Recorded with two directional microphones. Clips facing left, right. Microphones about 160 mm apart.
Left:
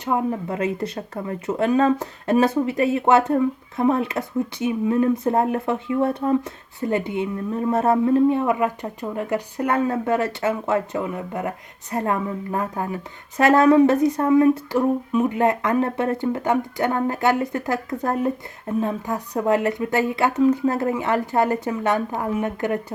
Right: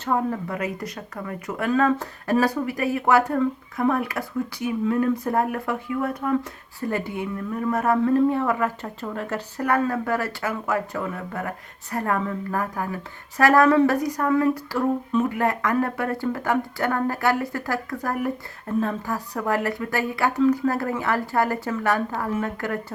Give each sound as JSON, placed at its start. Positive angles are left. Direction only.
{"t": 0.0, "sound": "speech", "side_deg": 20}